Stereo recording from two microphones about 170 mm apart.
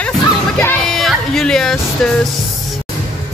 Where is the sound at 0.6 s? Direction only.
10° left (ahead or behind).